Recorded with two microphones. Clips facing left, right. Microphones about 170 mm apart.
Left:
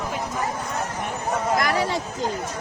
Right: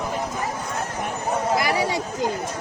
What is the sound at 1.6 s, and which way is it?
Speech, 10° right (ahead or behind).